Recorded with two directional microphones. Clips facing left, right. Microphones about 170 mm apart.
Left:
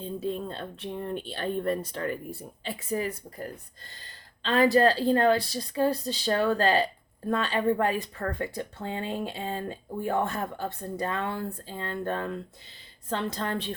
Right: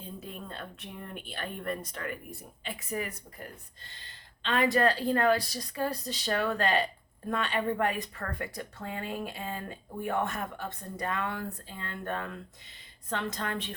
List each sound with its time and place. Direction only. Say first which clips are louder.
0.0 s speech: left 11 dB; 30° left (ahead or behind)